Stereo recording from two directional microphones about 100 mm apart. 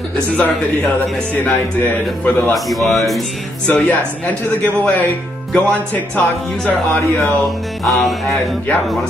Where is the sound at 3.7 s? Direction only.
15° left (ahead or behind).